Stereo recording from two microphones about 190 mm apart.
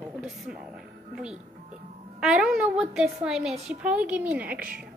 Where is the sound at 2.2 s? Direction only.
5° right (ahead or behind).